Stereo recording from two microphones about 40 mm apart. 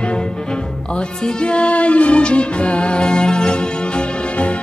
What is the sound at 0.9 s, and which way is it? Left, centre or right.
Music, left.